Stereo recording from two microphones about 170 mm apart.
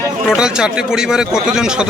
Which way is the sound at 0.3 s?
5° right (ahead or behind).